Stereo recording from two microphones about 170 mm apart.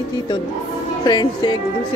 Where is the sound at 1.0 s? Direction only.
25° left (ahead or behind).